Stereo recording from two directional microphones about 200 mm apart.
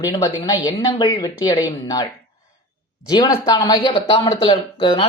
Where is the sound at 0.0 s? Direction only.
20° left (ahead or behind).